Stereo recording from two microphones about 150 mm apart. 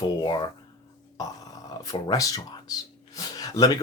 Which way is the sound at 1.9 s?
25° left (ahead or behind).